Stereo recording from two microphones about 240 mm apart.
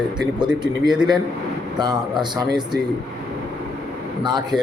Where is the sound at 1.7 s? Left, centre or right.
Centre.